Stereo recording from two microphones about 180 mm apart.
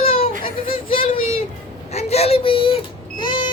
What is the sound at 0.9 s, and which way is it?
A child's voice, 30° left (ahead or behind).